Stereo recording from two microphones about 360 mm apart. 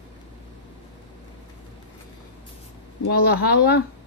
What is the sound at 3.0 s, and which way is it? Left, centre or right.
Speech, left.